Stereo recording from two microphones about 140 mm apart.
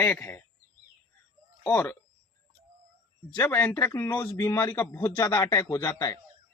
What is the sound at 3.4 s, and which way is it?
Speech, 10° left (ahead or behind).